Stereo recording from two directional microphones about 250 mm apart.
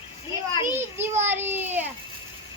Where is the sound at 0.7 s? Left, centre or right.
Centre.